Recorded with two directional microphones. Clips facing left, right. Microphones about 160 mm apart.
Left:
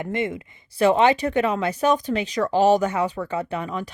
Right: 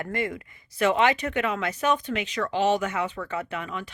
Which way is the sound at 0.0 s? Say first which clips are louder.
Left 4 dB; 25° left (ahead or behind).